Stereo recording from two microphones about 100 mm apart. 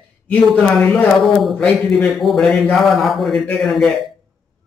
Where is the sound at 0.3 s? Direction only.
10° left (ahead or behind).